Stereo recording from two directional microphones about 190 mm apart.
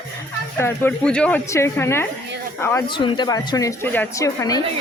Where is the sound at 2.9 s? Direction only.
25° left (ahead or behind).